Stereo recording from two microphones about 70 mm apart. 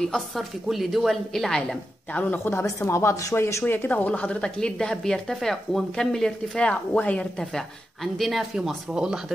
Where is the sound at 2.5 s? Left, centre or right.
Left.